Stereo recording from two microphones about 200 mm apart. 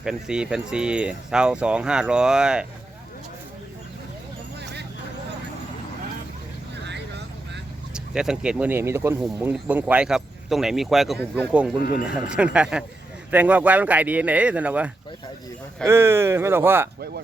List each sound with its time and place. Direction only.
0.0 s speech: 5° right (ahead or behind)
7.9 s speech: 5° right (ahead or behind)
11.8 s speech: 45° left (ahead or behind)
12.0 s speech: 5° right (ahead or behind)
15.9 s speech: 10° right (ahead or behind)